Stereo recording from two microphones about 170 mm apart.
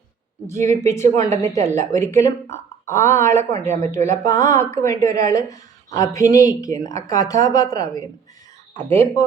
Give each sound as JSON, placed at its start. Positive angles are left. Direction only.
{"t": 0.7, "sound": "speech", "side_deg": 15}